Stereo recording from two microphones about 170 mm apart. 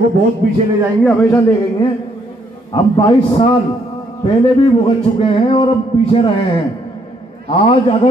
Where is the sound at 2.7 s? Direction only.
25° left (ahead or behind).